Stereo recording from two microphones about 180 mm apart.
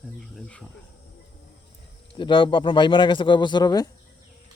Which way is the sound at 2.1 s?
25° left (ahead or behind).